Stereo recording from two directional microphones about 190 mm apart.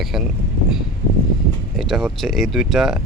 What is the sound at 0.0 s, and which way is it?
Speech, centre (ahead or behind).